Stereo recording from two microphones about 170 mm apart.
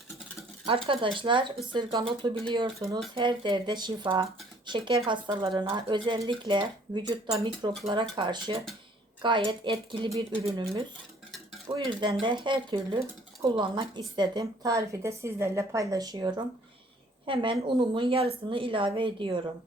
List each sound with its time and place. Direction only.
0.6 s speech: 30° right (ahead or behind)
11.7 s speech: 25° right (ahead or behind)